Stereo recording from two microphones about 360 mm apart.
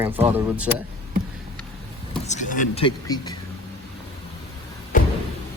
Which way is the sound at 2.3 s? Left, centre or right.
Left.